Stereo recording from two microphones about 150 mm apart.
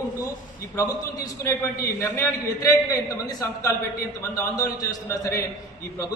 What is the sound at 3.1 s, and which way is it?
A man's voice, 25° left (ahead or behind).